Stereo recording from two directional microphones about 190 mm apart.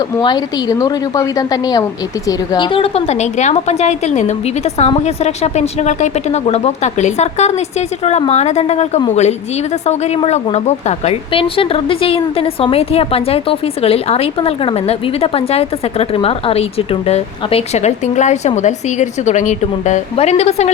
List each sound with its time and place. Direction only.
0.2 s a woman's voice: 20° left (ahead or behind)